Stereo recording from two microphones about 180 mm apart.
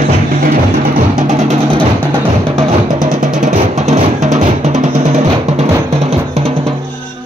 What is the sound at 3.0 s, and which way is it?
Music, 45° right (ahead or behind).